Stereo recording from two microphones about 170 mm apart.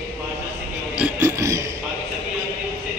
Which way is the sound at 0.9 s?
10° right (ahead or behind).